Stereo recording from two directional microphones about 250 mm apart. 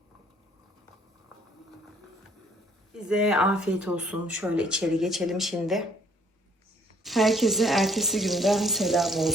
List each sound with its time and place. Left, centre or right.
2.9 s speech: centre
7.0 s speech: centre